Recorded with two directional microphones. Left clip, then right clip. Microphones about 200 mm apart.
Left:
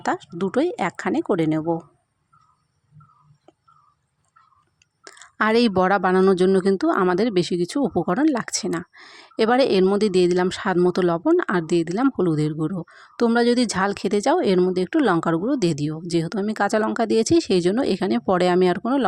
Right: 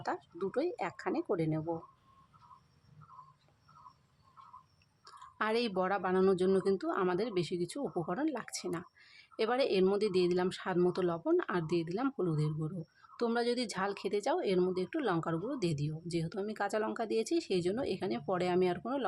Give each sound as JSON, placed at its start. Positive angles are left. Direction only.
{"t": 0.0, "sound": "speech", "side_deg": 40}
{"t": 5.0, "sound": "speech", "side_deg": 40}